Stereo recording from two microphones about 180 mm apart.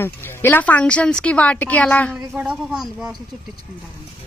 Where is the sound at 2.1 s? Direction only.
5° right (ahead or behind).